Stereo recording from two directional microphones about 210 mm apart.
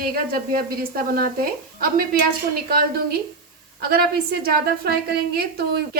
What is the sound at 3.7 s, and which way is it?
A woman's voice, 45° right (ahead or behind).